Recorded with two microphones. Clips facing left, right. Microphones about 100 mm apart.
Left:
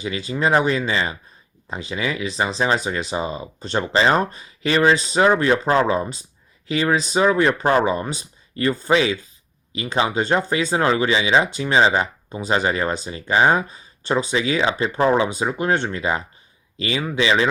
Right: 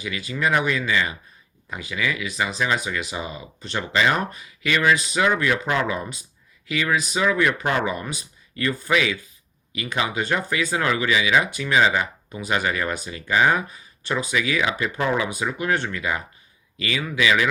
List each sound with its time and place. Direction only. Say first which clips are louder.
0.0 s speech: left 3 dB; 30° left (ahead or behind)